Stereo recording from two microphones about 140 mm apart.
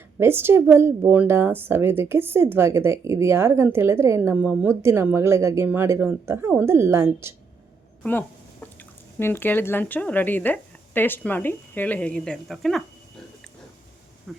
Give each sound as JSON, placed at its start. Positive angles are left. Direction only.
{"t": 0.2, "sound": "a woman's voice", "side_deg": -15}
{"t": 8.8, "sound": "speech", "side_deg": 15}
{"t": 14.3, "sound": "speech", "side_deg": 0}